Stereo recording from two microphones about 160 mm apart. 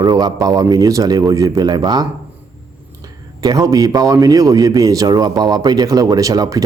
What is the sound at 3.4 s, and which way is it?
Speech, 25° right (ahead or behind).